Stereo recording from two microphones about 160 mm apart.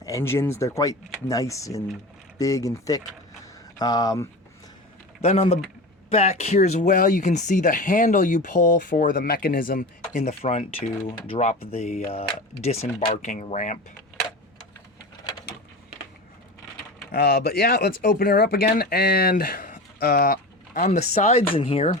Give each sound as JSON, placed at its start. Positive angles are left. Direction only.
{"t": 0.0, "sound": "speech", "side_deg": 20}
{"t": 3.4, "sound": "a sound", "side_deg": 25}
{"t": 5.2, "sound": "speech", "side_deg": 40}
{"t": 17.1, "sound": "speech", "side_deg": 75}